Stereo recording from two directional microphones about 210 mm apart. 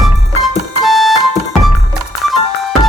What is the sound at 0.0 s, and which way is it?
Music, centre (ahead or behind).